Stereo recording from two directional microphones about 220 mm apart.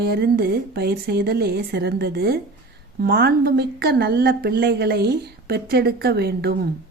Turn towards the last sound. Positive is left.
turn(degrees=-45)  # may be behind; listen again after turning